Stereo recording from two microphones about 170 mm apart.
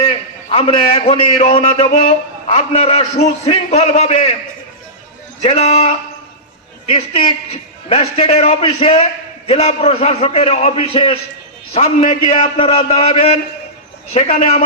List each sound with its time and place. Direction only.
0.0 s a man's voice: 35° left (ahead or behind)
5.4 s a man's voice: 40° left (ahead or behind)
6.9 s a man's voice: 30° left (ahead or behind)
12.5 s a man's voice: 35° left (ahead or behind)